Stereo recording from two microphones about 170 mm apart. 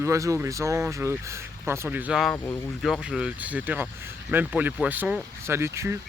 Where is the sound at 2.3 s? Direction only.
15° left (ahead or behind).